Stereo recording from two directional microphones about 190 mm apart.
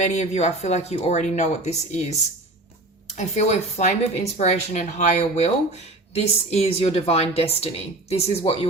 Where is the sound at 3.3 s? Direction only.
35° left (ahead or behind).